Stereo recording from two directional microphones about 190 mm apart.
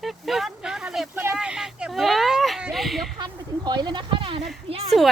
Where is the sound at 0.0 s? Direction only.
Centre (ahead or behind).